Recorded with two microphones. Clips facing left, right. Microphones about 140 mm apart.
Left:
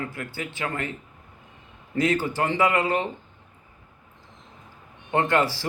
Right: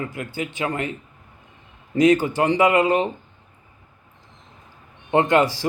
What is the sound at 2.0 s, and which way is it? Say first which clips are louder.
Speech: right 7 dB; 20° right (ahead or behind).